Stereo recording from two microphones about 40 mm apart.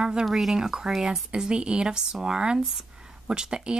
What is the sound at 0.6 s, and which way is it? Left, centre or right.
Speech, centre.